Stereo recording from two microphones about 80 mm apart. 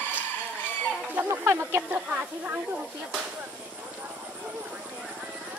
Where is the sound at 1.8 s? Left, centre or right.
Centre.